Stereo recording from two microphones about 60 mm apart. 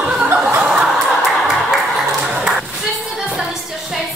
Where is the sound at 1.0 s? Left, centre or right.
Centre.